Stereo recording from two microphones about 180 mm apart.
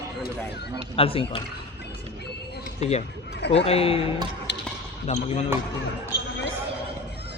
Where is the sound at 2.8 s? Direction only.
40° left (ahead or behind).